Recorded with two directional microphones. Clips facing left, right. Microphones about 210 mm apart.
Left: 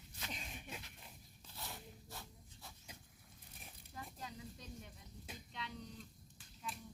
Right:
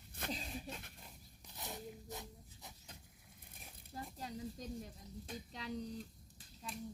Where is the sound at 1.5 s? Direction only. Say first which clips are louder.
Right 5 dB; 20° right (ahead or behind).